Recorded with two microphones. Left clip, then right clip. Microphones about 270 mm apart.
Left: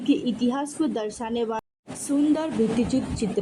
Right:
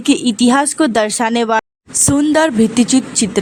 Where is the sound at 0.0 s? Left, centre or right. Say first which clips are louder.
Right 10 dB; right.